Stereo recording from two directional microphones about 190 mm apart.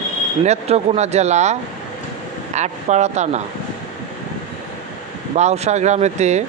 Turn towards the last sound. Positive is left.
turn(degrees=-35)  # may be behind; listen again after turning